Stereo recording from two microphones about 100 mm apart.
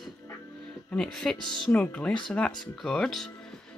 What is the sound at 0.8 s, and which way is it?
Speech, 5° left (ahead or behind).